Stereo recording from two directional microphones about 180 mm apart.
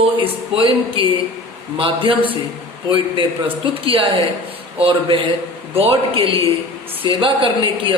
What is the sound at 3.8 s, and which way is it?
A man's voice, 30° right (ahead or behind).